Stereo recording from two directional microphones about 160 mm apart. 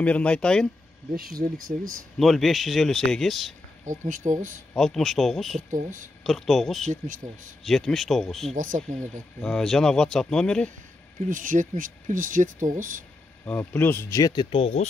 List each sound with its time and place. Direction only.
0.0 s speech: 10° left (ahead or behind)
1.1 s speech: 65° right (ahead or behind)
2.1 s speech: centre (ahead or behind)
3.8 s speech: 50° right (ahead or behind)
4.7 s speech: centre (ahead or behind)
5.7 s speech: 55° right (ahead or behind)
6.2 s speech: centre (ahead or behind)
11.1 s speech: 55° right (ahead or behind)
13.5 s speech: 10° left (ahead or behind); by 14.9 s 35° left (ahead or behind)